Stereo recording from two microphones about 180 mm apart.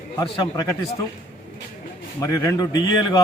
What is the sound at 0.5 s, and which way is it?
Speech, 20° left (ahead or behind).